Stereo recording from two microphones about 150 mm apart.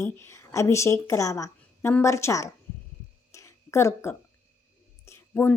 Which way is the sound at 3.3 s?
20° left (ahead or behind).